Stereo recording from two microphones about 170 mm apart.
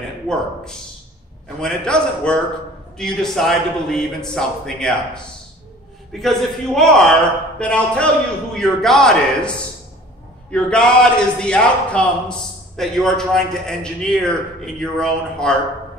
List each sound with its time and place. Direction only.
1.6 s a man's voice: 5° left (ahead or behind)